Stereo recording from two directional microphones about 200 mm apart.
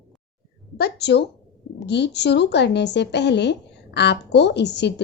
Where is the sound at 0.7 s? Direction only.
55° left (ahead or behind).